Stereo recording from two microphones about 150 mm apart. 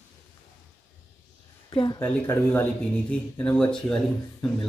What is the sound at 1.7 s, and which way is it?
Speech, 35° left (ahead or behind).